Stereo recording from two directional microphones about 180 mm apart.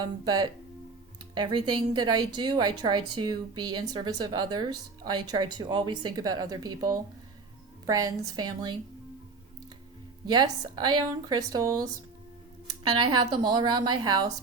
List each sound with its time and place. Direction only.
0.0 s a woman's voice: 20° right (ahead or behind)
10.2 s a woman's voice: 25° right (ahead or behind)